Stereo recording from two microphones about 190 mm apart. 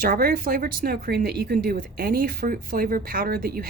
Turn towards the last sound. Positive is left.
turn(degrees=-50)  # may be behind; listen again after turning